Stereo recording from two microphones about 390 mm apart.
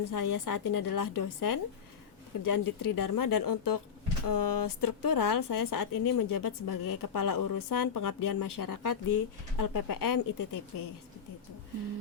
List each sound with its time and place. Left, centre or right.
0.0 s a woman's voice: left